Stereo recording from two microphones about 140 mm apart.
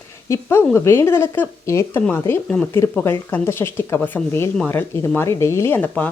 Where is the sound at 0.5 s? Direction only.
20° left (ahead or behind).